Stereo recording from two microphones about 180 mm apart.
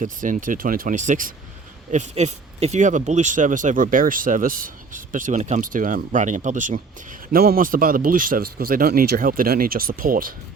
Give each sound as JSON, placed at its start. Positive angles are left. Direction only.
{"t": 0.0, "sound": "speech", "side_deg": -45}